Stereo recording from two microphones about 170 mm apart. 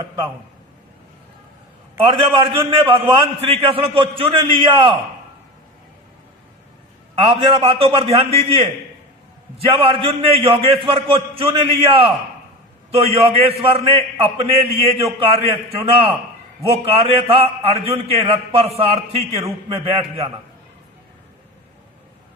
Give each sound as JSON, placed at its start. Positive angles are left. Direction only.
{"t": 2.6, "sound": "a man's voice", "side_deg": -30}
{"t": 7.2, "sound": "a man's voice", "side_deg": -30}